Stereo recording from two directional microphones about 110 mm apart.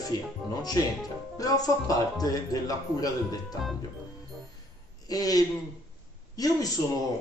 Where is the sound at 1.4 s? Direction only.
35° left (ahead or behind).